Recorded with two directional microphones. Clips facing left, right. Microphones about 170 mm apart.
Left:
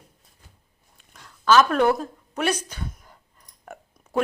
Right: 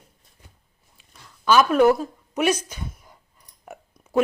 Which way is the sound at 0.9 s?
5° right (ahead or behind).